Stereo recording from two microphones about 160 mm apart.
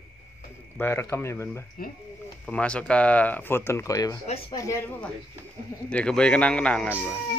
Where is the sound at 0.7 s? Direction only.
15° left (ahead or behind).